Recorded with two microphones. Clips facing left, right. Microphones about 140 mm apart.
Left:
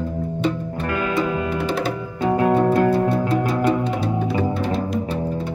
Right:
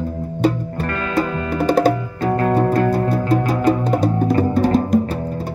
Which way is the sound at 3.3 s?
40° right (ahead or behind).